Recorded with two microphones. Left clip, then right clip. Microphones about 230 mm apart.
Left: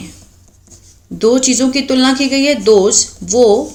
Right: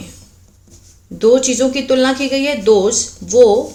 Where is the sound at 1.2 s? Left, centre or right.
Left.